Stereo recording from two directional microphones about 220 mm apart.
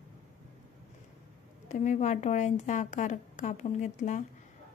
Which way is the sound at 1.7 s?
35° left (ahead or behind).